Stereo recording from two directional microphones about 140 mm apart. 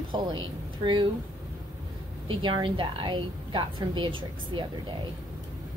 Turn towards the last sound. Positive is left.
turn(degrees=-35)  # may be behind; listen again after turning